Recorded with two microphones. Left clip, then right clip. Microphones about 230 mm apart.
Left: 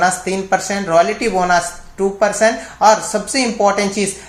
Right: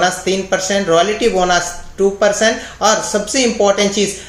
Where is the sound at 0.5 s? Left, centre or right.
Left.